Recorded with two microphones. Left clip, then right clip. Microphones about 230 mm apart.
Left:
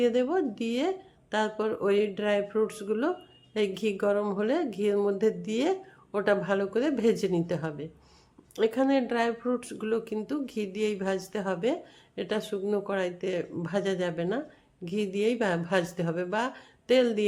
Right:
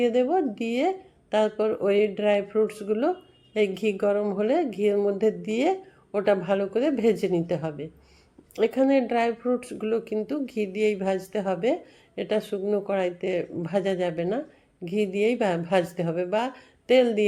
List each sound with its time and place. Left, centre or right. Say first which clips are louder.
0.0 s speech: right 3 dB; centre